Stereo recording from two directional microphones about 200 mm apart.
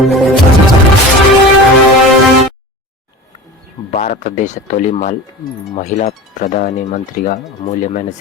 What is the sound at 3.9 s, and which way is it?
Speech, 40° left (ahead or behind).